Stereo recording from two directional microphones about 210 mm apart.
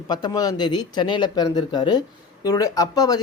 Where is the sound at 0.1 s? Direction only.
20° left (ahead or behind).